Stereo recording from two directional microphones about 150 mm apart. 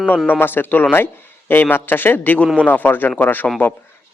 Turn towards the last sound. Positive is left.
turn(degrees=10)  # may be behind; listen again after turning